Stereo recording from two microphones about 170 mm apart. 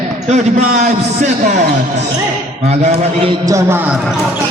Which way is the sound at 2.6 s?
40° right (ahead or behind).